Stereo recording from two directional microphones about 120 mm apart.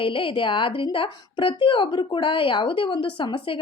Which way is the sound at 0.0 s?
45° left (ahead or behind).